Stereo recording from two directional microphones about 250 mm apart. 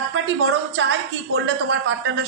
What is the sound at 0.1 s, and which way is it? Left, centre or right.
A woman's voice, right.